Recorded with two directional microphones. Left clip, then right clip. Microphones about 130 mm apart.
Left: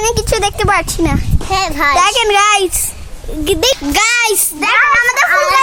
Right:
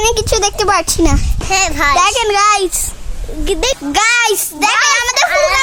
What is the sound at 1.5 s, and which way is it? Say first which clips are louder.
A child's voice: right 1 dB; centre (ahead or behind).